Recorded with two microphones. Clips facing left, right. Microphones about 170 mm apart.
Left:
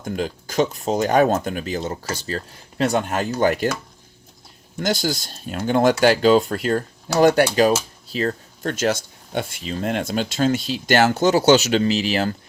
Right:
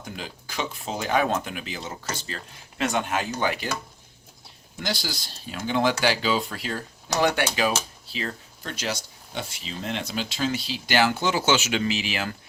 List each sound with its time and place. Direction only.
0.0 s speech: 45° left (ahead or behind)
4.8 s speech: 45° left (ahead or behind)